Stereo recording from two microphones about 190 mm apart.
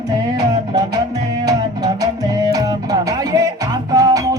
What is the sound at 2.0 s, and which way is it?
Music, 20° right (ahead or behind).